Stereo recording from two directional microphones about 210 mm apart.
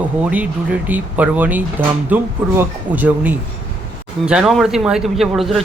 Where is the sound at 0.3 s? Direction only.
5° right (ahead or behind).